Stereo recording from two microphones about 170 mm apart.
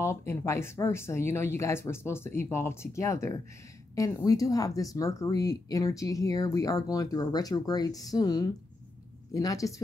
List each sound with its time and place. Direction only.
0.0 s speech: 15° left (ahead or behind)